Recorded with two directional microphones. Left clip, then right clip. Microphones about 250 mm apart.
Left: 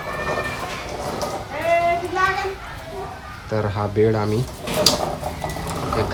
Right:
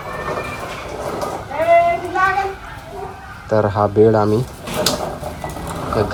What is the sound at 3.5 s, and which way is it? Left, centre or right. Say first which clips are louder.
Speech: right 8 dB; centre.